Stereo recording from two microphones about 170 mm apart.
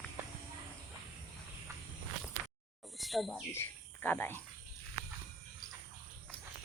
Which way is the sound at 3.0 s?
Centre (ahead or behind).